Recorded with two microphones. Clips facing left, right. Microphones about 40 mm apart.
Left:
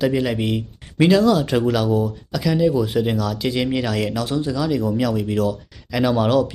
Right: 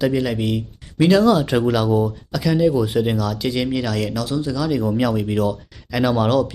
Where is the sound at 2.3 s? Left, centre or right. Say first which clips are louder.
Right 1 dB; centre.